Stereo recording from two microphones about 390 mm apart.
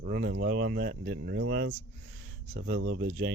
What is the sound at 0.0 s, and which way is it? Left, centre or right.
Speech, right.